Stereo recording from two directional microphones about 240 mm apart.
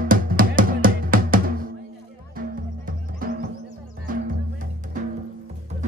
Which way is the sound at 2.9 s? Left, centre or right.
Right.